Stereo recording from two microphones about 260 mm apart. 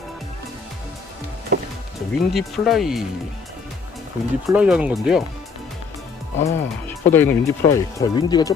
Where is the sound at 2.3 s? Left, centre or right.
Centre.